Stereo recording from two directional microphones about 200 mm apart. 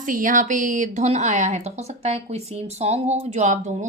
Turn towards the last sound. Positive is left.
turn(degrees=-35)  # may be behind; listen again after turning